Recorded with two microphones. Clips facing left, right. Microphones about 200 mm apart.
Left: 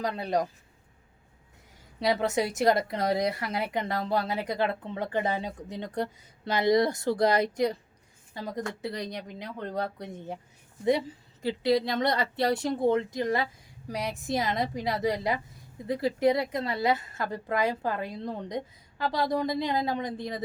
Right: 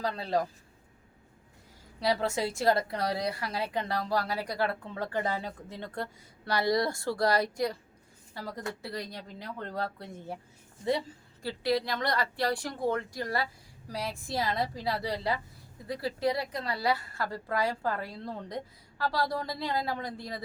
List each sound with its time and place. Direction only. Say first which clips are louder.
0.0 s speech: left 2 dB; 20° left (ahead or behind)
2.0 s speech: left 3 dB; 20° left (ahead or behind)
11.4 s speech: left 4 dB; 20° left (ahead or behind)